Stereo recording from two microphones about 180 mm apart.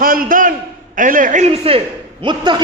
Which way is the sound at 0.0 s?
50° right (ahead or behind).